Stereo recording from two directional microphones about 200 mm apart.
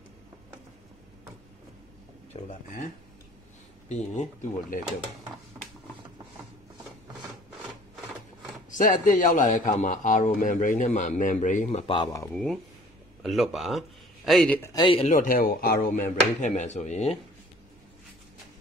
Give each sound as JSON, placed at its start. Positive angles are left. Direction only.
{"t": 2.3, "sound": "a man's voice", "side_deg": 35}
{"t": 3.9, "sound": "a man's voice", "side_deg": 35}
{"t": 8.6, "sound": "a man's voice", "side_deg": 40}
{"t": 13.2, "sound": "speech", "side_deg": 0}
{"t": 14.7, "sound": "a man's voice", "side_deg": 25}